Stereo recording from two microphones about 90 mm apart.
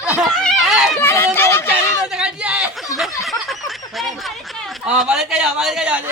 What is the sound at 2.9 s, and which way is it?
Snicker, centre (ahead or behind).